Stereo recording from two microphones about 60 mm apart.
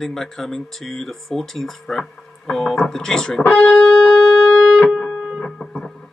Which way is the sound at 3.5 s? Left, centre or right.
Left.